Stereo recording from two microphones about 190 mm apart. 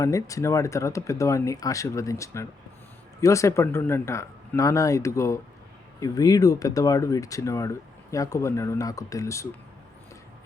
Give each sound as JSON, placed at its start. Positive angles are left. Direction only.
{"t": 0.0, "sound": "speech", "side_deg": 15}